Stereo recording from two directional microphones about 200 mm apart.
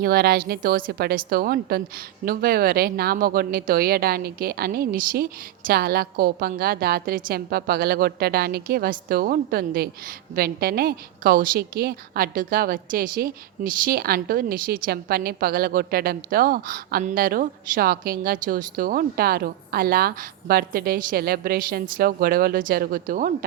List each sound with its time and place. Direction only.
0.0 s a woman's voice: 50° right (ahead or behind)